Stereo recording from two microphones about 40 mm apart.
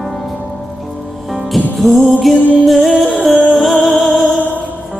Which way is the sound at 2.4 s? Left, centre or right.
Left.